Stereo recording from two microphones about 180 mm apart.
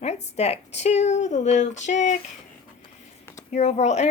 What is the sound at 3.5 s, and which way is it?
Speech, 40° left (ahead or behind).